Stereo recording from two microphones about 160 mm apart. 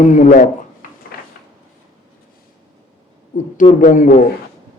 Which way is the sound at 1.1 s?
75° left (ahead or behind).